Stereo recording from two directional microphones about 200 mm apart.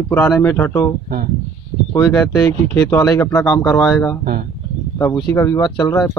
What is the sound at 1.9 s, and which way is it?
Speech, 15° left (ahead or behind).